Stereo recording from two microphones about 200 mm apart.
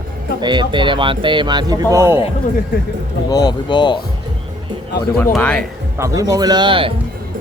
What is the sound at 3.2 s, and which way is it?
Speech, 20° left (ahead or behind).